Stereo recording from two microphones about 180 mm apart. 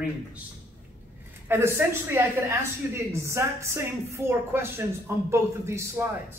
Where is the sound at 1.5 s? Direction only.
15° right (ahead or behind).